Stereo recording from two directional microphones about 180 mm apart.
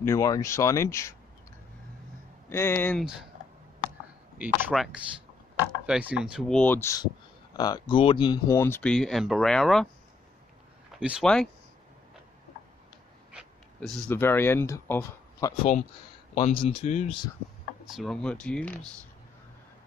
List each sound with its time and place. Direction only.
0.0 s speech: 15° left (ahead or behind)
2.5 s speech: 15° left (ahead or behind)
3.0 s speech: 5° right (ahead or behind)
4.4 s speech: 10° right (ahead or behind); by 8.9 s 10° left (ahead or behind)
8.9 s speech: centre (ahead or behind)
11.0 s speech: 5° right (ahead or behind)
14.0 s speech: 10° left (ahead or behind)
16.3 s speech: 35° left (ahead or behind)
17.9 s speech: 5° left (ahead or behind)